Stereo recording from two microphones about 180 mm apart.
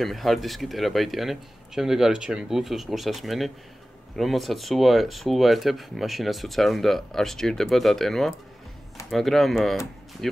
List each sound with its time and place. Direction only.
0.0 s speech: centre (ahead or behind)